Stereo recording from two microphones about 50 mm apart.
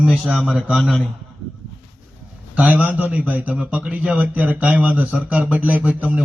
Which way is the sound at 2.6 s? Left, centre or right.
Right.